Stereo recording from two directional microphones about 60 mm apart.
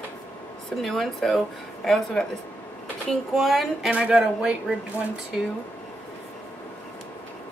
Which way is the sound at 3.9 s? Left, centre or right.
Centre.